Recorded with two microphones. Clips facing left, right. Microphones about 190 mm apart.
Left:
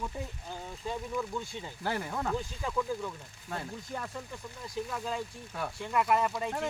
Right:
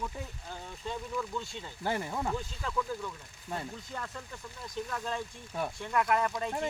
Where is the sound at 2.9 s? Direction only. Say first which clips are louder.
Left 2 dB; 15° left (ahead or behind).